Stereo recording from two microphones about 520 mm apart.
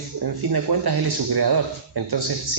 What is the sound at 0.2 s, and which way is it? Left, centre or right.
Speech, right.